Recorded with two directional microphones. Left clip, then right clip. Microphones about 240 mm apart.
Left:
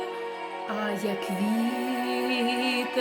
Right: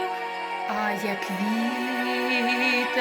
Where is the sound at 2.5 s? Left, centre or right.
Right.